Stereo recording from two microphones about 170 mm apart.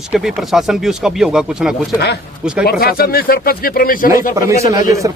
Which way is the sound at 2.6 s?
60° left (ahead or behind).